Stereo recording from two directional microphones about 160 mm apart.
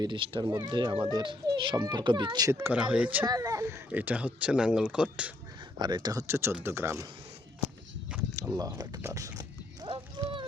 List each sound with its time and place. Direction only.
0.0 s speech: 25° right (ahead or behind); by 3.2 s 10° right (ahead or behind)
3.2 s speech: 25° right (ahead or behind); by 5.3 s 5° right (ahead or behind)
5.8 s speech: 25° right (ahead or behind)
8.1 s a sound: 5° right (ahead or behind)
8.5 s speech: 25° right (ahead or behind)
10.2 s a sound: 30° right (ahead or behind)